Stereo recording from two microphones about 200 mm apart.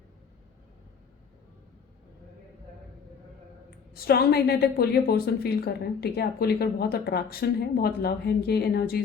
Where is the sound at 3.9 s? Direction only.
50° left (ahead or behind).